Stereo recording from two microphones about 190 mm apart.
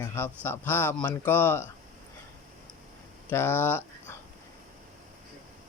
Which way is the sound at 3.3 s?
10° left (ahead or behind).